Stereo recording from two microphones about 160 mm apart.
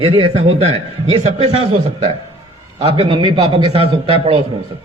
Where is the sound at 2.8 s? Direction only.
35° right (ahead or behind).